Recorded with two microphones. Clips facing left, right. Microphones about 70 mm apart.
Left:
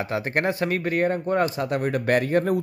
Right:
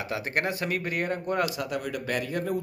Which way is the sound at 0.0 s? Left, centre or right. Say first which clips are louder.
Left 5 dB; left.